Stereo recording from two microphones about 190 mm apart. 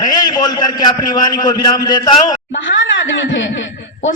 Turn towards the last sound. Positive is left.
turn(degrees=75)  # may be behind; listen again after turning